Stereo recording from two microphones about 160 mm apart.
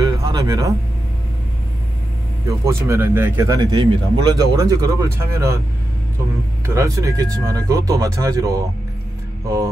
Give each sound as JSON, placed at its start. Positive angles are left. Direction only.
{"t": 0.0, "sound": "music", "side_deg": -20}
{"t": 2.4, "sound": "speech", "side_deg": -20}
{"t": 6.6, "sound": "speech", "side_deg": -20}